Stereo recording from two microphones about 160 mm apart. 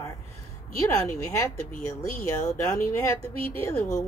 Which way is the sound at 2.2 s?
20° left (ahead or behind).